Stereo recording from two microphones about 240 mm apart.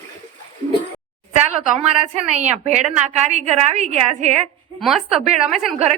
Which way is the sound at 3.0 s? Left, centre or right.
Right.